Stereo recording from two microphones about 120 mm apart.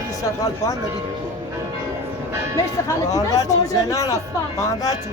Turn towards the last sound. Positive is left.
turn(degrees=30)  # may be behind; listen again after turning